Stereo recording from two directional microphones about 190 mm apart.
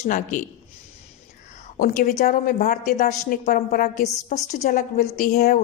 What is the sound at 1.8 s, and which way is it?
A woman's voice, 45° left (ahead or behind).